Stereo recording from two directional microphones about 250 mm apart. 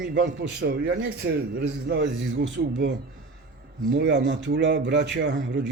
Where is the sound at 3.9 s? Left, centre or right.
Right.